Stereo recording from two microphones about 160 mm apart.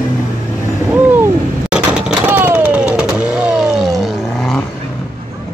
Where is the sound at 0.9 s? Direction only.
10° right (ahead or behind).